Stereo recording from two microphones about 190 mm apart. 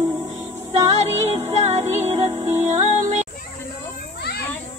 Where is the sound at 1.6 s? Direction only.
35° right (ahead or behind).